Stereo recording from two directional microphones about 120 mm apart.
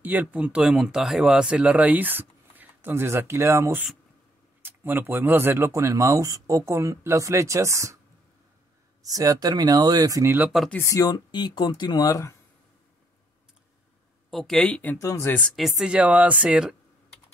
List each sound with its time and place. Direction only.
0.0 s speech: 15° right (ahead or behind)
9.0 s speech: 30° right (ahead or behind)
10.8 s speech: 25° left (ahead or behind)
14.3 s speech: centre (ahead or behind)
15.0 s speech: 25° left (ahead or behind)
15.5 s speech: centre (ahead or behind)